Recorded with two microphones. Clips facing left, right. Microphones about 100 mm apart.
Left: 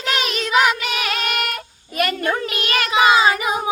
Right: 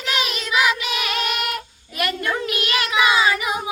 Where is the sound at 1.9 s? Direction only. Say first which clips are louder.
Left 3 dB; 40° left (ahead or behind).